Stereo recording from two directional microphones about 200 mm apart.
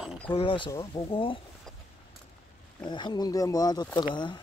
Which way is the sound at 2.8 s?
20° left (ahead or behind).